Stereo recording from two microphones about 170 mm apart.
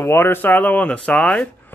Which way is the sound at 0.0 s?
15° left (ahead or behind).